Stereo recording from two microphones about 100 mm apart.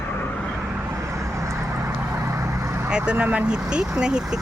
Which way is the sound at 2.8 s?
10° right (ahead or behind).